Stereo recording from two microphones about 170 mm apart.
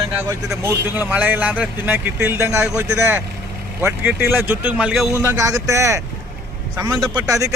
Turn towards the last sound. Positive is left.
turn(degrees=-20)  # may be behind; listen again after turning